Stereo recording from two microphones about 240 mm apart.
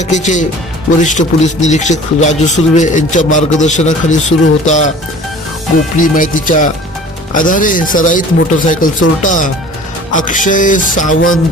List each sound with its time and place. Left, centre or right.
0.0 s a man's voice: left
6.0 s a man's voice: left
10.1 s a man's voice: left